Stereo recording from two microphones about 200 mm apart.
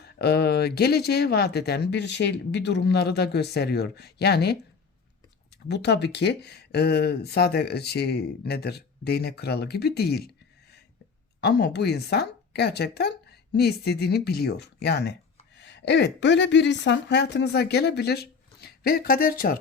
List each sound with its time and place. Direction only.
0.0 s speech: 55° left (ahead or behind)
5.6 s speech: 55° left (ahead or behind)